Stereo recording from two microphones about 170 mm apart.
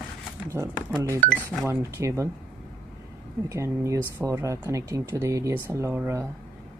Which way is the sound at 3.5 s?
15° right (ahead or behind).